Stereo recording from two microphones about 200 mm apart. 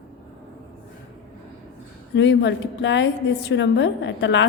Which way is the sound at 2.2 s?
65° left (ahead or behind).